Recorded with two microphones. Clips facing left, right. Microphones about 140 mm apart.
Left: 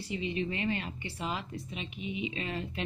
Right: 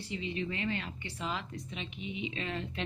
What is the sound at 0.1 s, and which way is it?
Speech, 15° left (ahead or behind).